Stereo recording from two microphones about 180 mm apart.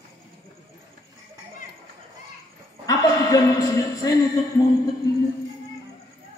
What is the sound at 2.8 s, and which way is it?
A man's voice, 20° left (ahead or behind).